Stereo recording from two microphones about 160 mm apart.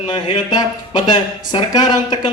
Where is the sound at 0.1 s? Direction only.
25° left (ahead or behind).